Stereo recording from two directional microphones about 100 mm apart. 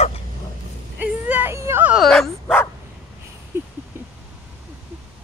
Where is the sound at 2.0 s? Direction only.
5° left (ahead or behind).